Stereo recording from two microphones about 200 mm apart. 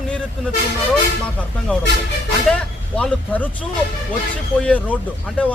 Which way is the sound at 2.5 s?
5° left (ahead or behind).